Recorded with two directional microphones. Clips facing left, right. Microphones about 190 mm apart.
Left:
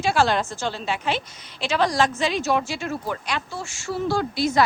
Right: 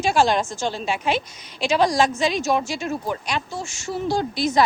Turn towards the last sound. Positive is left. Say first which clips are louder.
# right 1 dB
turn(degrees=-20)  # may be behind; listen again after turning